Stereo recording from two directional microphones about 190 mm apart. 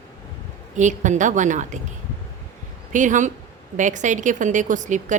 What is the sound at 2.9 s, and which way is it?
A woman's voice, 40° right (ahead or behind).